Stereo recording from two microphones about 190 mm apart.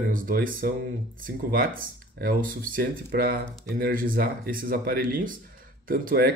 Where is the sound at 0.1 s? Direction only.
45° right (ahead or behind).